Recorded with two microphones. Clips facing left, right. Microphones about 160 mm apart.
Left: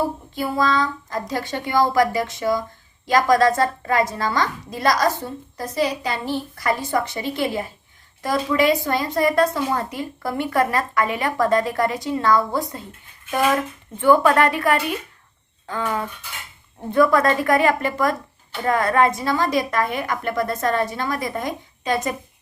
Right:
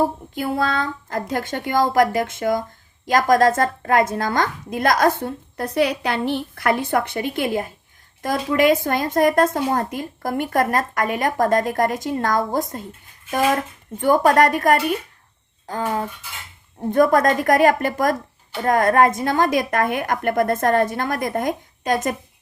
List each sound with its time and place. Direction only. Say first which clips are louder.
0.0 s a woman's voice: right 2 dB; 50° right (ahead or behind)
14.0 s a woman's voice: even; 40° right (ahead or behind)